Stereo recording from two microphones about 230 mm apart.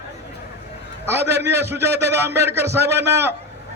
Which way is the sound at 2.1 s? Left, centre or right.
Centre.